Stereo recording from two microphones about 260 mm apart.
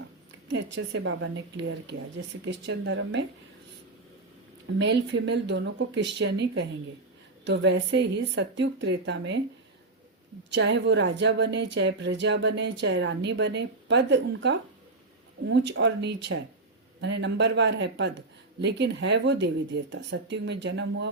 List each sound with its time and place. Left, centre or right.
0.5 s speech: right
4.8 s speech: right
10.5 s a woman's voice: right